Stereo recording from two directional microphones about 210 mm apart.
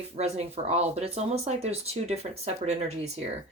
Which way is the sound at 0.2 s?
30° right (ahead or behind).